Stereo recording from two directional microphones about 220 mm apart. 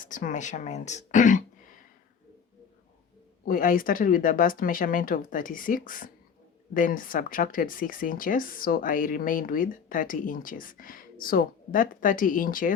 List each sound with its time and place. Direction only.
0.0 s speech: 35° left (ahead or behind)
3.4 s speech: 40° left (ahead or behind)